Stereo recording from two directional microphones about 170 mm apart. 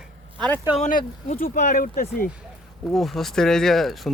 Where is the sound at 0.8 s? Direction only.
50° left (ahead or behind).